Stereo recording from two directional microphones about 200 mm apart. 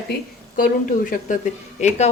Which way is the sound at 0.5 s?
45° left (ahead or behind).